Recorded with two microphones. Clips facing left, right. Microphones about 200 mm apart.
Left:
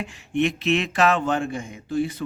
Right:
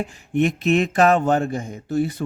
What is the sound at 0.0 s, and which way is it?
A man's voice, 45° right (ahead or behind).